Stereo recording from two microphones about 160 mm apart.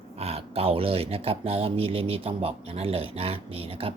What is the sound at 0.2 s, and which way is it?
Speech, 40° right (ahead or behind).